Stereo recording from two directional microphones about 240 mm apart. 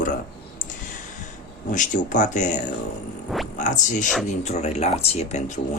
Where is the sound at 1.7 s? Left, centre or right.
Left.